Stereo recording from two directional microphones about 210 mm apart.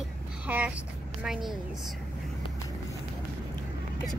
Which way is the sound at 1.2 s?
5° right (ahead or behind).